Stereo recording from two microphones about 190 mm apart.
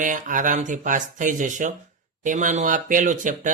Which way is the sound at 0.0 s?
45° right (ahead or behind).